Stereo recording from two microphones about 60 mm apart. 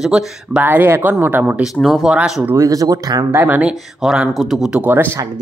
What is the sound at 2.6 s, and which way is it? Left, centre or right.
Speech, right.